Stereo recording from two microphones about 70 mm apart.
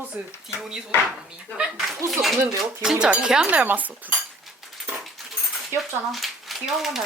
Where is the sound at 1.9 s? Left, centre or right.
Centre.